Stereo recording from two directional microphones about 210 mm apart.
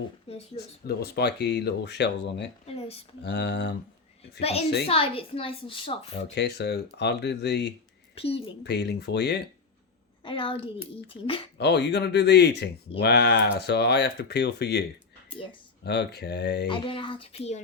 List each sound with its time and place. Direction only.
0.3 s a woman's voice: 30° left (ahead or behind)
0.9 s speech: 50° left (ahead or behind)
2.6 s a sound: 30° left (ahead or behind)
3.2 s speech: 55° left (ahead or behind)
4.4 s a woman's voice: 30° left (ahead or behind)
6.3 s speech: 50° left (ahead or behind)
8.1 s a woman's voice: 30° left (ahead or behind)
8.6 s speech: 50° left (ahead or behind)
10.2 s a woman's voice: 25° left (ahead or behind)
11.5 s speech: 55° left (ahead or behind)
16.6 s a woman's voice: 25° left (ahead or behind)